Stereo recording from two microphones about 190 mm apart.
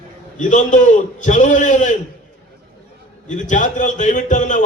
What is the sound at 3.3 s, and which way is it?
A man's voice, 40° left (ahead or behind).